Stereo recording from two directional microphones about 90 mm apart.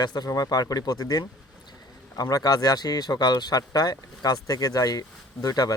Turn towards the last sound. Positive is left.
turn(degrees=45)  # may be behind; listen again after turning